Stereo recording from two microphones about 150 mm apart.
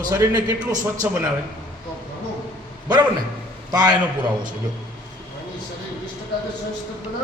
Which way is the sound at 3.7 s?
25° right (ahead or behind).